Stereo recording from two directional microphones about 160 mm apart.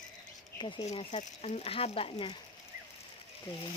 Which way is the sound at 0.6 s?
30° left (ahead or behind).